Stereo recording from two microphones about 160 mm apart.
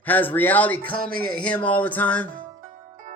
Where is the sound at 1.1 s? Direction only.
65° right (ahead or behind).